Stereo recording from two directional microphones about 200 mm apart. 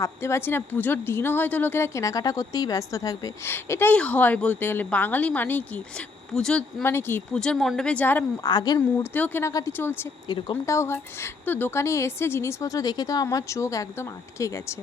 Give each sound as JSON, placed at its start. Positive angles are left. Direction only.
{"t": 0.0, "sound": "a woman's voice", "side_deg": 15}
{"t": 8.4, "sound": "speech", "side_deg": 20}
{"t": 9.1, "sound": "a woman's voice", "side_deg": 10}